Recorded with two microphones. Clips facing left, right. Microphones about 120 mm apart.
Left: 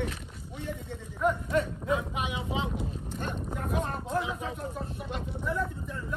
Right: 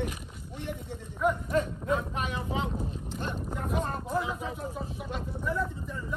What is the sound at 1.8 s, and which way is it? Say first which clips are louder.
Vehicle: even; 15° left (ahead or behind).